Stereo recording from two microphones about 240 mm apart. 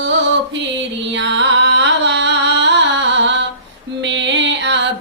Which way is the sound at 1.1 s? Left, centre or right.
Right.